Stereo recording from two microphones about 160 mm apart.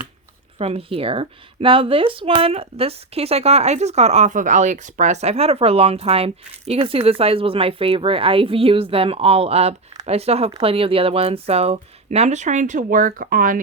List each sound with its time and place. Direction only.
0.6 s speech: 40° right (ahead or behind); by 13.6 s 60° right (ahead or behind)